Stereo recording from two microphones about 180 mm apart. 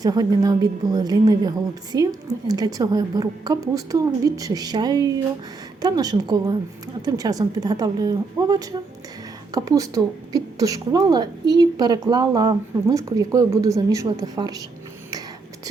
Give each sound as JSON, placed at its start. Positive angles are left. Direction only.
{"t": 0.0, "sound": "a woman's voice", "side_deg": -20}